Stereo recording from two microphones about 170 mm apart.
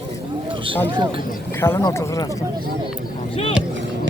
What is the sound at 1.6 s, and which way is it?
Speech, 20° left (ahead or behind).